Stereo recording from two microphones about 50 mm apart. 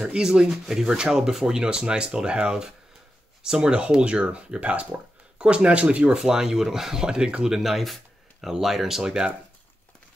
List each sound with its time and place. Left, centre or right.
0.0 s speech: centre
7.5 s speech: centre